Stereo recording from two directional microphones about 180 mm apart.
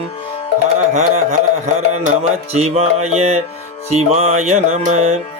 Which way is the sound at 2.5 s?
35° right (ahead or behind).